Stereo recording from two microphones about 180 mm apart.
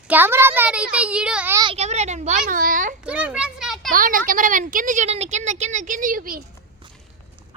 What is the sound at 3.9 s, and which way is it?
A woman's voice, 50° right (ahead or behind).